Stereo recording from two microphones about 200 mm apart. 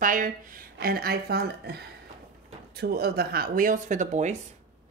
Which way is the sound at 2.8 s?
50° right (ahead or behind).